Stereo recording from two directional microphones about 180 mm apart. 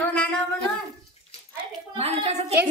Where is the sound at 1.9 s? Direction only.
35° right (ahead or behind).